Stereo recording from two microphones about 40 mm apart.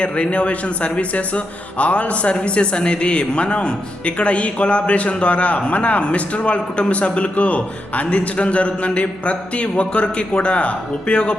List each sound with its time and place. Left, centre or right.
0.0 s speech: left